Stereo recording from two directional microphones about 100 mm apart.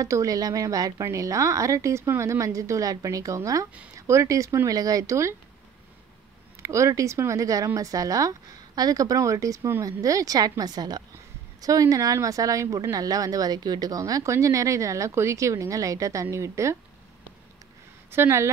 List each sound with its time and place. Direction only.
0.0 s a woman's voice: 35° right (ahead or behind)
6.6 s a woman's voice: 30° right (ahead or behind)
18.1 s speech: 25° right (ahead or behind)